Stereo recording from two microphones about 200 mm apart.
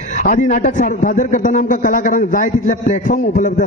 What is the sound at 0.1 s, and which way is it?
A man's voice, 40° left (ahead or behind).